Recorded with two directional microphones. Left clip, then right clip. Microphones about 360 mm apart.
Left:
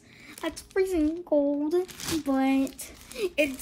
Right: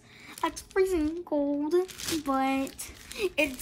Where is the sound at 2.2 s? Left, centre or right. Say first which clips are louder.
Left 2 dB; centre.